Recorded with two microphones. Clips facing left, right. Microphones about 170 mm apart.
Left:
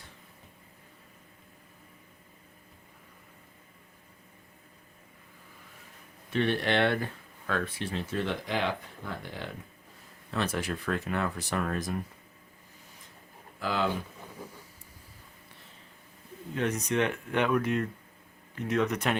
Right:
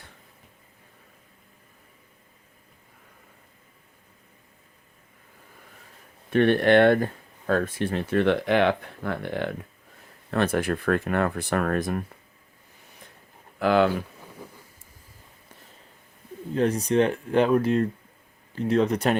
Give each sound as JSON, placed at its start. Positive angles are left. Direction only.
{"t": 6.3, "sound": "speech", "side_deg": -55}
{"t": 13.6, "sound": "speech", "side_deg": -65}
{"t": 16.6, "sound": "speech", "side_deg": -35}